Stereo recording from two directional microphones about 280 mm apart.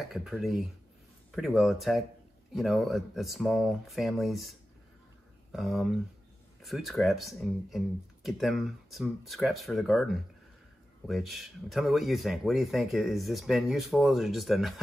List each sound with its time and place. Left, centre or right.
0.0 s speech: centre